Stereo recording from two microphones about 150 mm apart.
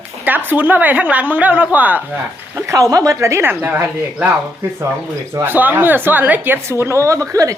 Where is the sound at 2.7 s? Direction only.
25° right (ahead or behind).